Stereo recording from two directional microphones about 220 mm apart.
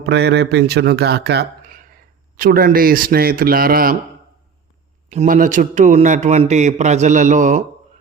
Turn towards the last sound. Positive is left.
turn(degrees=-35)  # may be behind; listen again after turning